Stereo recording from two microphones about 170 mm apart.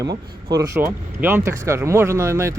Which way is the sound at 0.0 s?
20° right (ahead or behind).